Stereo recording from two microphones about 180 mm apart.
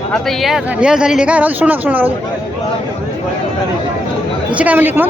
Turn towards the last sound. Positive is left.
turn(degrees=-10)  # may be behind; listen again after turning